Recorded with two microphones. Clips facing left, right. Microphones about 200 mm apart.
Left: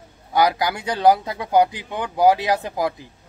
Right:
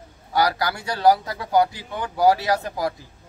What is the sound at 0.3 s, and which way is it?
Speech, 20° left (ahead or behind).